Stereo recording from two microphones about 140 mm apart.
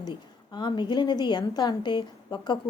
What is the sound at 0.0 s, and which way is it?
A woman's voice, 30° left (ahead or behind).